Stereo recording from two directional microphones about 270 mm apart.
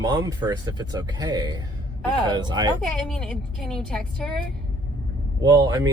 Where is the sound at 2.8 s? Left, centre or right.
Centre.